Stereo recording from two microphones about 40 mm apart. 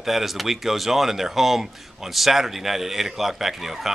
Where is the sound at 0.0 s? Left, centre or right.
Centre.